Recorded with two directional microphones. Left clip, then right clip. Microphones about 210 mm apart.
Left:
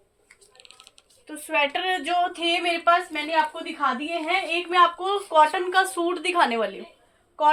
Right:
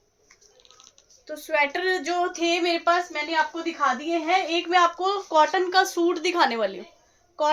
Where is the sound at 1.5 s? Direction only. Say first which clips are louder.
Even; 20° right (ahead or behind).